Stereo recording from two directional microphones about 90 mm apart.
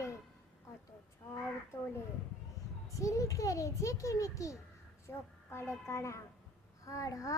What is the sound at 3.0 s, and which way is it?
Child singing, 35° left (ahead or behind).